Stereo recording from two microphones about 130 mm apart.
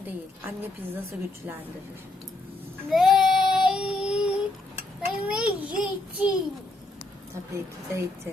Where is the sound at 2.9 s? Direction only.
Centre (ahead or behind).